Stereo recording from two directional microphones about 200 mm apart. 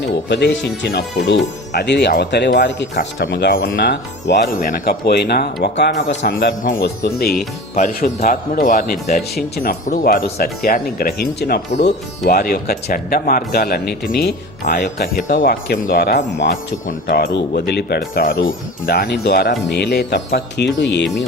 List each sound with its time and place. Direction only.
0.3 s a man's voice: 60° left (ahead or behind)
7.8 s a man's voice: 40° left (ahead or behind); by 21.2 s 60° left (ahead or behind)